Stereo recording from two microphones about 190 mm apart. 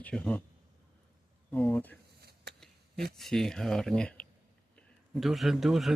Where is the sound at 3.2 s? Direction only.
Centre (ahead or behind).